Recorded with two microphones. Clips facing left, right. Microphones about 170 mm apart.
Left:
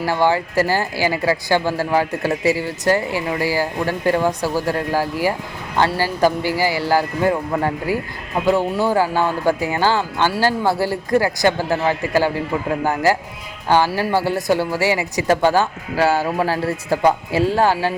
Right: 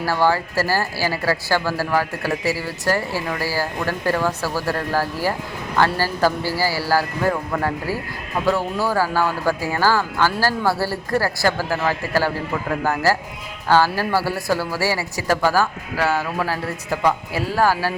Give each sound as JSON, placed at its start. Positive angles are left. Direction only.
{"t": 0.0, "sound": "speech", "side_deg": 20}